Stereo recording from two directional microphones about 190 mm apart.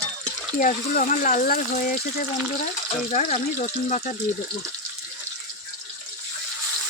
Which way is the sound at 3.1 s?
40° left (ahead or behind).